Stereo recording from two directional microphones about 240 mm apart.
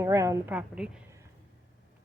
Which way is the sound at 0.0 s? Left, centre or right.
Centre.